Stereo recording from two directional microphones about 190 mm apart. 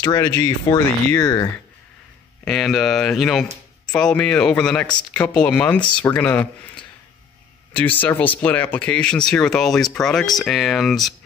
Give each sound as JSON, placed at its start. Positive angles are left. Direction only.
{"t": 0.0, "sound": "speech", "side_deg": 15}
{"t": 2.4, "sound": "speech", "side_deg": 0}
{"t": 7.7, "sound": "speech", "side_deg": 10}